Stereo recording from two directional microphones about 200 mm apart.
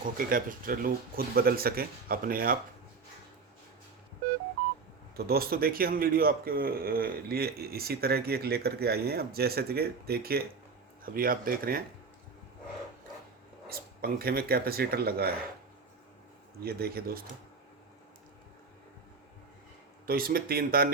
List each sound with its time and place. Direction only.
0.0 s speech: 45° right (ahead or behind)
5.1 s speech: 50° right (ahead or behind)
13.7 s speech: 50° right (ahead or behind)
16.6 s speech: 50° right (ahead or behind)
20.1 s speech: 45° right (ahead or behind)